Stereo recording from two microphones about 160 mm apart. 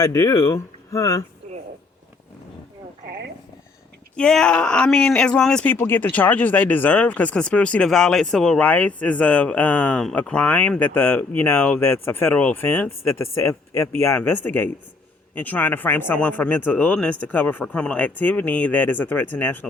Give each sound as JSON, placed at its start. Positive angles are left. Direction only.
{"t": 0.0, "sound": "speech", "side_deg": 20}
{"t": 4.1, "sound": "speech", "side_deg": 5}